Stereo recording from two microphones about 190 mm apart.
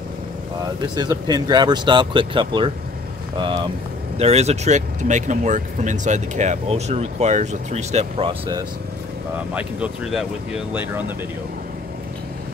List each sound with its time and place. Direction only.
0.9 s speech: 20° right (ahead or behind)
4.2 s speech: 35° right (ahead or behind)
9.5 s speech: 5° right (ahead or behind)